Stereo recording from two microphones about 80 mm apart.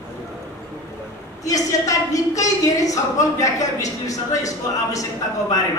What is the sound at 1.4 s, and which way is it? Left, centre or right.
A woman's voice, left.